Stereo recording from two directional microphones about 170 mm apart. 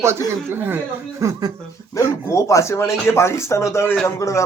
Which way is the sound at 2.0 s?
20° left (ahead or behind).